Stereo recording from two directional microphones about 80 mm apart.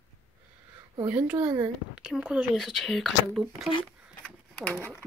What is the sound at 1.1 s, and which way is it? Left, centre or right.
Speech, centre.